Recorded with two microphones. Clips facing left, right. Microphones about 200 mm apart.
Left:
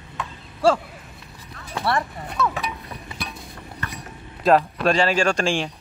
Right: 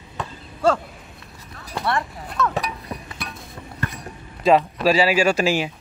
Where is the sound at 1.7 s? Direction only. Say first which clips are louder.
Left 1 dB; centre (ahead or behind).